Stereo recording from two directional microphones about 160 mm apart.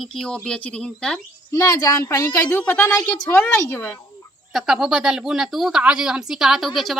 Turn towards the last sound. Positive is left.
turn(degrees=0)  # may be behind; listen again after turning